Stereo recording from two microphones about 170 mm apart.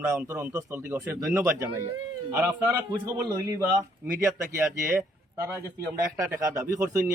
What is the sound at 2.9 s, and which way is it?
A man's voice, 20° right (ahead or behind).